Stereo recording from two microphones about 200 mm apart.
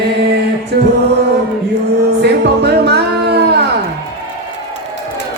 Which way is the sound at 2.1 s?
55° right (ahead or behind).